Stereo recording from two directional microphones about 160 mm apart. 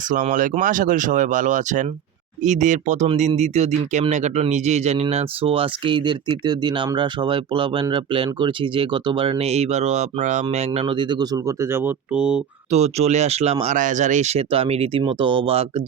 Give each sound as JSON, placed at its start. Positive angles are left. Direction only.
{"t": 0.1, "sound": "speech", "side_deg": -50}
{"t": 10.8, "sound": "speech", "side_deg": -30}
{"t": 12.7, "sound": "speech", "side_deg": -45}
{"t": 13.7, "sound": "speech", "side_deg": -50}